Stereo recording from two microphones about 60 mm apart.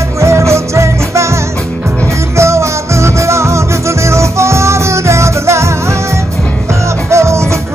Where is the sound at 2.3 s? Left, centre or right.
Right.